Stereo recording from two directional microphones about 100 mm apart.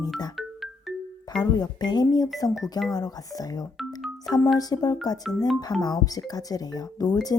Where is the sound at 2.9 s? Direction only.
40° left (ahead or behind).